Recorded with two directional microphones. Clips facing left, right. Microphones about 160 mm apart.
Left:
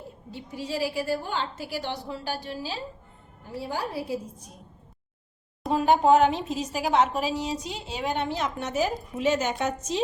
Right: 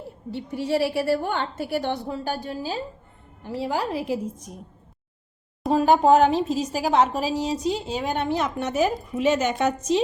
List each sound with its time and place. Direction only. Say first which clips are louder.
0.3 s a woman's voice: right 8 dB; 65° right (ahead or behind); by 2.7 s 45° right (ahead or behind)
3.4 s a woman's voice: right 5 dB; 90° right
5.6 s speech: right 3 dB; 40° right (ahead or behind); by 10.0 s 70° right (ahead or behind)